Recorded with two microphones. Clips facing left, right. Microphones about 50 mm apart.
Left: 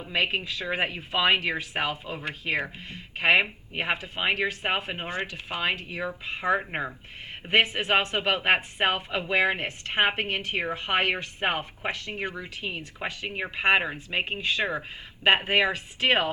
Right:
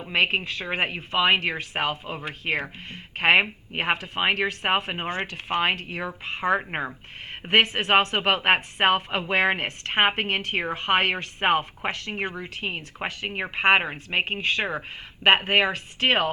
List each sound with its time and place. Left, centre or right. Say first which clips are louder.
0.1 s speech: right 4 dB; right